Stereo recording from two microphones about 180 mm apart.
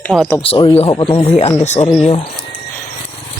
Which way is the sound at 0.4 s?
30° left (ahead or behind).